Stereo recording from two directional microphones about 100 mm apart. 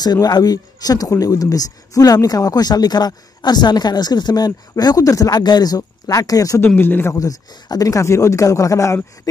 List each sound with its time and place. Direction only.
0.0 s speech: 40° left (ahead or behind)
6.6 s speech: 20° left (ahead or behind)
7.2 s speech: 40° left (ahead or behind)